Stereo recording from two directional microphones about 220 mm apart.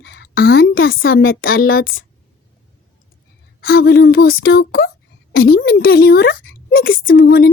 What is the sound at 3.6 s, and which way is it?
A woman's voice, 45° left (ahead or behind).